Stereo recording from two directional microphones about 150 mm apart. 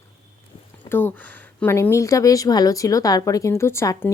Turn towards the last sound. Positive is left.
turn(degrees=20)  # may be behind; listen again after turning